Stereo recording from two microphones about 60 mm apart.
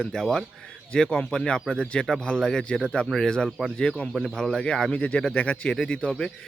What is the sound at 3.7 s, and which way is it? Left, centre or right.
Speech, centre.